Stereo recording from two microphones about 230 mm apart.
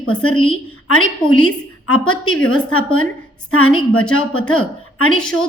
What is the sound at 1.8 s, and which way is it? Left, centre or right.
Speech, left.